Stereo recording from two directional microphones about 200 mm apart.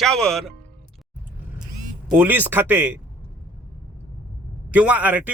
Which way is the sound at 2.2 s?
10° right (ahead or behind).